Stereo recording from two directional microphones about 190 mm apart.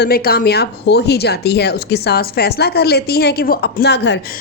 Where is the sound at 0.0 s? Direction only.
55° left (ahead or behind).